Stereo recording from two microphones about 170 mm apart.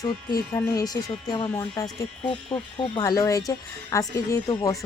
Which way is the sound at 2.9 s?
20° left (ahead or behind).